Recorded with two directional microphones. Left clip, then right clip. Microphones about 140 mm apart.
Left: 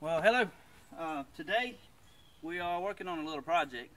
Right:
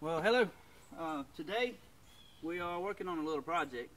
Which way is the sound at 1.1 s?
15° left (ahead or behind).